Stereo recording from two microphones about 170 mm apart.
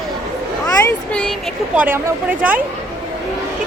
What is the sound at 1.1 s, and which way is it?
Speech, 5° left (ahead or behind).